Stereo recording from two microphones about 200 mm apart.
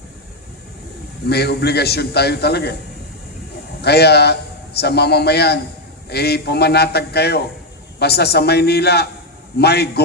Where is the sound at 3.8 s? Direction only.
55° left (ahead or behind).